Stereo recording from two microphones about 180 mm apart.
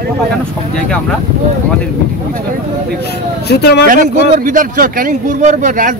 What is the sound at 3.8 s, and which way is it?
Speech, 50° right (ahead or behind).